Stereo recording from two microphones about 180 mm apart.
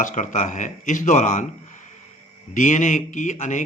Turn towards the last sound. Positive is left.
turn(degrees=45)  # may be behind; listen again after turning